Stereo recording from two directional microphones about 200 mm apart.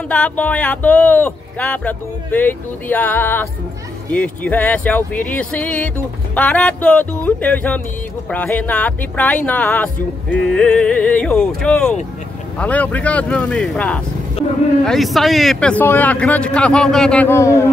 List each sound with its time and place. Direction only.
0.1 s speech: 5° left (ahead or behind)